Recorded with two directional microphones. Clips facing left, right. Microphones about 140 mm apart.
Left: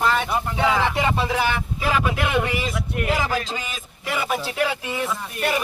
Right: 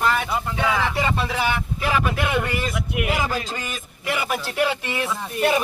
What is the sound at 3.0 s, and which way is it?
A man's voice, 10° right (ahead or behind).